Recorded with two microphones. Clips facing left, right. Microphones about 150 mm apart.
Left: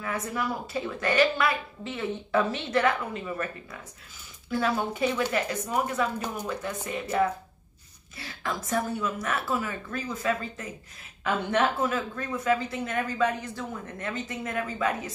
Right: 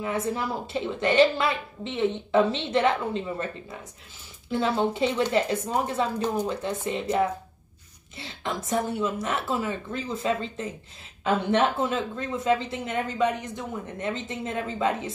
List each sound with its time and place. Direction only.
0.0 s a woman's voice: 25° right (ahead or behind)